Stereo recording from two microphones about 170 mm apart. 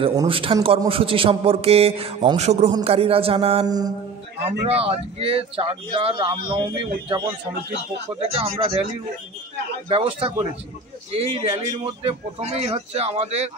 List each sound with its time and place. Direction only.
0.1 s speech: 25° right (ahead or behind)
3.6 s a man's voice: 20° right (ahead or behind)
4.5 s a man's voice: 35° right (ahead or behind)
8.4 s speech: 35° right (ahead or behind)
9.8 s speech: 30° right (ahead or behind)